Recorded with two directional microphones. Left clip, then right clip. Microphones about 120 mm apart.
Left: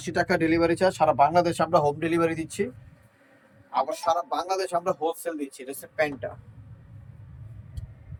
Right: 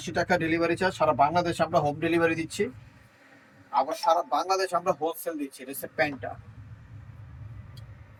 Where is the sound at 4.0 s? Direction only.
15° left (ahead or behind).